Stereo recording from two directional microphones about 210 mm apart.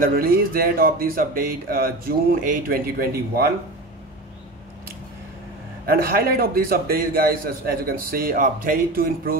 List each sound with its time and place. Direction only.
0.0 s a man's voice: 45° right (ahead or behind)
5.9 s a man's voice: 45° right (ahead or behind)